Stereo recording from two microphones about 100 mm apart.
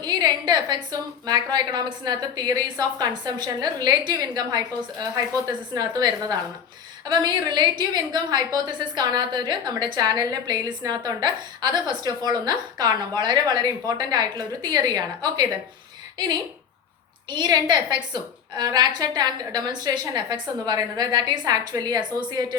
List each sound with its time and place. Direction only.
0.0 s a woman's voice: 45° right (ahead or behind)
17.2 s a woman's voice: 45° right (ahead or behind)